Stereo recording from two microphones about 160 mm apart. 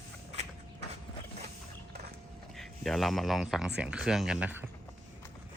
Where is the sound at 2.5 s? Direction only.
Centre (ahead or behind).